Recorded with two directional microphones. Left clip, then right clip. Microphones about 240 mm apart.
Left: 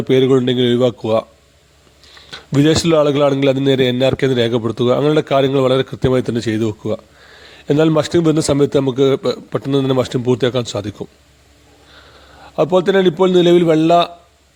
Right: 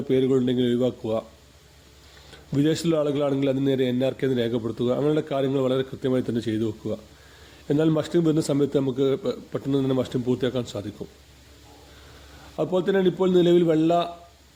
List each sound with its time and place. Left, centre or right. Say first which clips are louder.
0.1 s a man's voice: left 9 dB; left
2.3 s a man's voice: left 10 dB; left
12.5 s a man's voice: left 10 dB; left